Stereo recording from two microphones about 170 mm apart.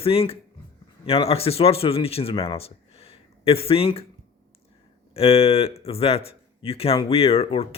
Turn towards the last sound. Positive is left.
turn(degrees=35)  # may be behind; listen again after turning